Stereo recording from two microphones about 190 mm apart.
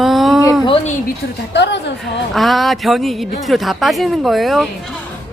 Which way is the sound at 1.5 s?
65° left (ahead or behind).